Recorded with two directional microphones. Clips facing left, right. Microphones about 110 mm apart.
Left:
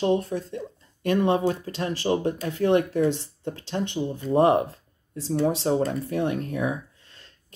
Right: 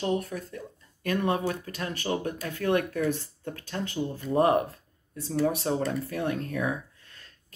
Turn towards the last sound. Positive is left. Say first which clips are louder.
# left 2 dB
turn(degrees=25)  # may be behind; listen again after turning